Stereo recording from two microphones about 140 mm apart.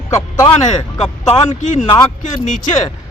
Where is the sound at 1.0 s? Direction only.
45° left (ahead or behind).